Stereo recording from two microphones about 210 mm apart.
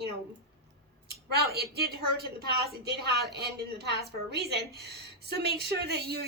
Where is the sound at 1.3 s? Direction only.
50° right (ahead or behind).